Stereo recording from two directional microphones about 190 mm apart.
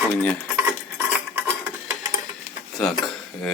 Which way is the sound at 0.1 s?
5° left (ahead or behind).